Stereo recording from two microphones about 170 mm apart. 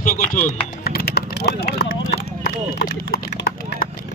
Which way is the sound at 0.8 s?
70° left (ahead or behind).